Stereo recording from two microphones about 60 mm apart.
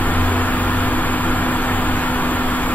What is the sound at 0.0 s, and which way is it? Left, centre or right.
Vehicle, left.